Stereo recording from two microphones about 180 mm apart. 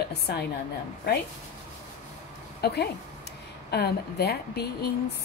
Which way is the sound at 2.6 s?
65° left (ahead or behind).